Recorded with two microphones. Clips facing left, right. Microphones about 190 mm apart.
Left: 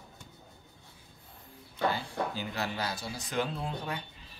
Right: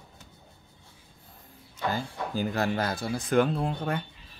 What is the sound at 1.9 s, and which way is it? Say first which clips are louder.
Speech: right 3 dB; 45° right (ahead or behind).